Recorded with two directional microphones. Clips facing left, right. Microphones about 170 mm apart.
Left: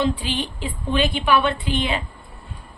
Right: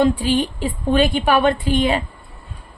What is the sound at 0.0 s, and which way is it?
A woman's voice, 45° right (ahead or behind).